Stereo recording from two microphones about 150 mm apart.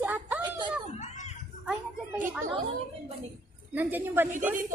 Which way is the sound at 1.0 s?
50° left (ahead or behind).